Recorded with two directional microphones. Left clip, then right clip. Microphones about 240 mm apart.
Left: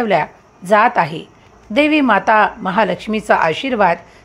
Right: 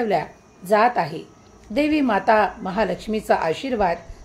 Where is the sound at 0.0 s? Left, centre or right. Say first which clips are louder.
Left 6 dB; centre.